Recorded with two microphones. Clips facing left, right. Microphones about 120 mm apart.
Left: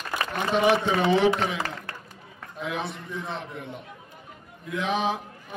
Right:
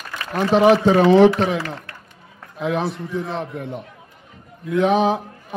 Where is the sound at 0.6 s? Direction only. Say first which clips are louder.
Right 8 dB; 35° right (ahead or behind).